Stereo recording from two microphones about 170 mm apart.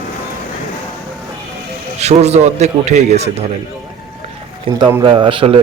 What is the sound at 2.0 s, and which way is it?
Speech, 40° right (ahead or behind).